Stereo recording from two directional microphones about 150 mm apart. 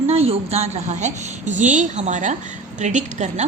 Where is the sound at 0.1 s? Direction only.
45° right (ahead or behind).